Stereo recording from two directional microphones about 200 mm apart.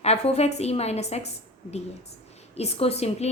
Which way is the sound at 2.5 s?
30° left (ahead or behind).